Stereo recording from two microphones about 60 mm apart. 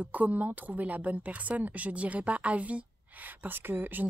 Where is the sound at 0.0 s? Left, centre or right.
Right.